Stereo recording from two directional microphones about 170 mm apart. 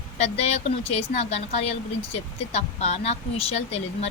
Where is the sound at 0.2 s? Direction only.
40° left (ahead or behind).